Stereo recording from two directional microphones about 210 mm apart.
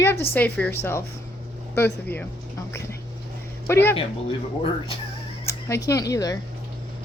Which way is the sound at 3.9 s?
25° left (ahead or behind).